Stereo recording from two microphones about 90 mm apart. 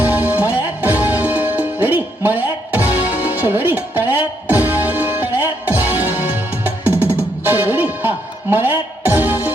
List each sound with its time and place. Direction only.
0.0 s music: 20° right (ahead or behind)